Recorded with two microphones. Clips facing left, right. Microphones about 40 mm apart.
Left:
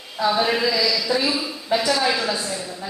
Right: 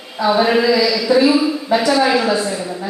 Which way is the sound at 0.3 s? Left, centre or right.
Centre.